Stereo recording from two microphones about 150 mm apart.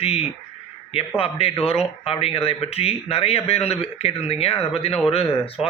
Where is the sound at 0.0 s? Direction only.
45° left (ahead or behind).